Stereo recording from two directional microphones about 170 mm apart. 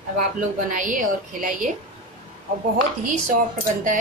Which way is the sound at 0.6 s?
50° right (ahead or behind).